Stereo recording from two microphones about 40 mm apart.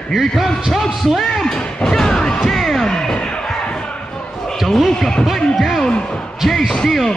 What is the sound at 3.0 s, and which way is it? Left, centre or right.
Slam, centre.